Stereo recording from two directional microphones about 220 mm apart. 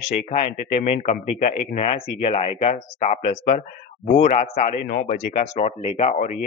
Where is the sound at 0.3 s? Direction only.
30° left (ahead or behind).